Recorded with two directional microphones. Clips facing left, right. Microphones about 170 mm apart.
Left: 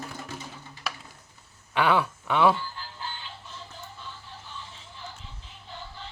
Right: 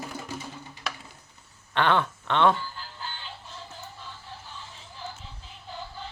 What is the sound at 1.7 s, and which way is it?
Speech, 5° left (ahead or behind).